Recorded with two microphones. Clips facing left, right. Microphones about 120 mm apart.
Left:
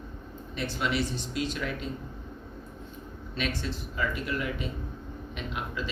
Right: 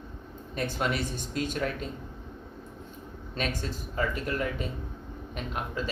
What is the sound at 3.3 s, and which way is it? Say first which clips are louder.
Speech: even; 45° right (ahead or behind).